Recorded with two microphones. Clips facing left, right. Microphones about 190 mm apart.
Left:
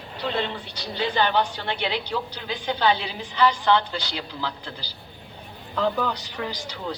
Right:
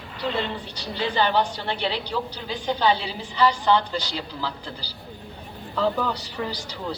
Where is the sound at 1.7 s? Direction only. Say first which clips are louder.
Even; 35° right (ahead or behind).